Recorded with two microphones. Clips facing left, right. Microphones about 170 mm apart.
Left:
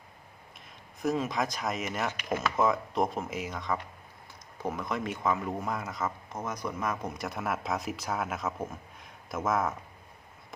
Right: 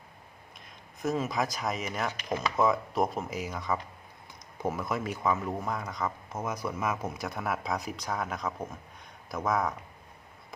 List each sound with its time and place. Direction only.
1.0 s speech: centre (ahead or behind)